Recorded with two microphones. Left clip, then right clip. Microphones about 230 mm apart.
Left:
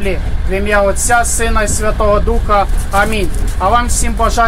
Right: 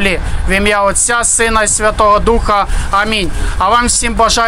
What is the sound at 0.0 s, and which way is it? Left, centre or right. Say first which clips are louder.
A man's voice: right 5 dB; right.